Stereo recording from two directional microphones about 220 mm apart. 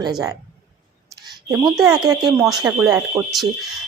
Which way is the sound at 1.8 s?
15° right (ahead or behind).